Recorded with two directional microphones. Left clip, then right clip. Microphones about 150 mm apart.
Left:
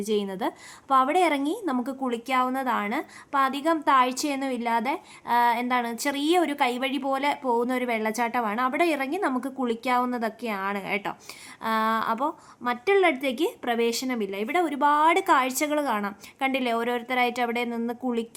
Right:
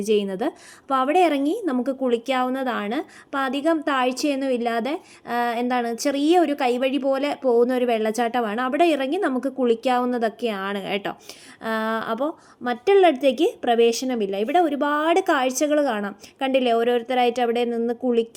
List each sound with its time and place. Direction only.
0.0 s a woman's voice: 20° right (ahead or behind)